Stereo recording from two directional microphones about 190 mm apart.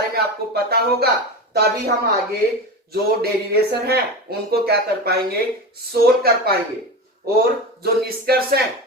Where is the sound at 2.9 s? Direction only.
55° right (ahead or behind).